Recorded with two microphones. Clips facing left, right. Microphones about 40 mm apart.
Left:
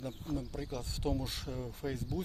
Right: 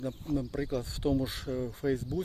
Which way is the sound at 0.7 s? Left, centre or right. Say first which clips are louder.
Right 6 dB; centre.